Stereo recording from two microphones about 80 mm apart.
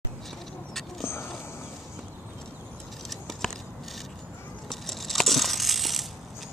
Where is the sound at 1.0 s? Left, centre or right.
Left.